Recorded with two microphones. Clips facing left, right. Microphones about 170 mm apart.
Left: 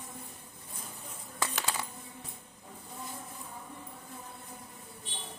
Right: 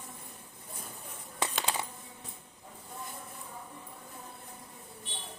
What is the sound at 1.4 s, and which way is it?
Coin, 20° right (ahead or behind).